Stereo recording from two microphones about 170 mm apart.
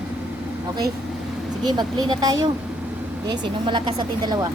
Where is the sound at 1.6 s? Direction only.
25° right (ahead or behind).